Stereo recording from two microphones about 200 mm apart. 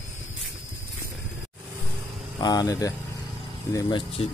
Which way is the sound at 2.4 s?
20° left (ahead or behind).